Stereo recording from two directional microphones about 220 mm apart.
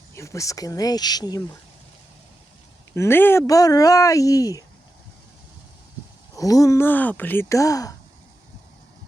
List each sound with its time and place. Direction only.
0.1 s speech: 15° left (ahead or behind)
2.9 s speech: 10° left (ahead or behind)
6.3 s speech: 15° left (ahead or behind)